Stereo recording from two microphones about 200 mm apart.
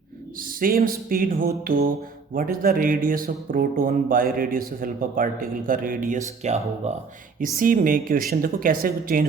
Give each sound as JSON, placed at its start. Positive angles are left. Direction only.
{"t": 0.3, "sound": "speech", "side_deg": -45}
{"t": 7.5, "sound": "speech", "side_deg": -45}